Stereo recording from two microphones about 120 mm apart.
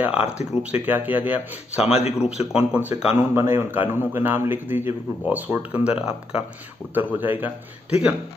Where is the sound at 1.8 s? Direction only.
60° left (ahead or behind).